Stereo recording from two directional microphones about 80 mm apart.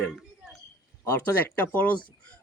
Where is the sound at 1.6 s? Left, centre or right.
Centre.